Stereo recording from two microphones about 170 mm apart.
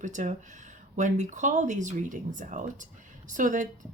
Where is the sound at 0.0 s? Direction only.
45° right (ahead or behind).